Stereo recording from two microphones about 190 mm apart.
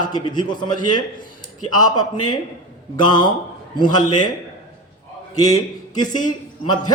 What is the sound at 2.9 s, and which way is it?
A man's voice, 25° left (ahead or behind).